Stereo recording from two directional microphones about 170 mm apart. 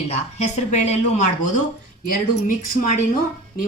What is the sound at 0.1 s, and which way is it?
Speech, 40° left (ahead or behind).